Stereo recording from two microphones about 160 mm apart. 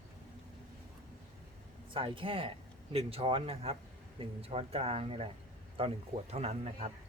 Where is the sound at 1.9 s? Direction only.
35° right (ahead or behind).